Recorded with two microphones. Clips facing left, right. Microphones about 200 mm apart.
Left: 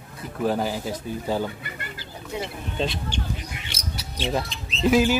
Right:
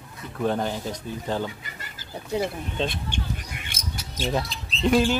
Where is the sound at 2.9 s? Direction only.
55° right (ahead or behind).